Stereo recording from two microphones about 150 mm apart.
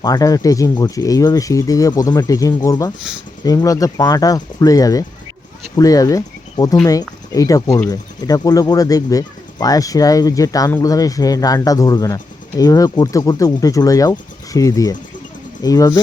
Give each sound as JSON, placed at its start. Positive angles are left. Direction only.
{"t": 0.0, "sound": "speech", "side_deg": 25}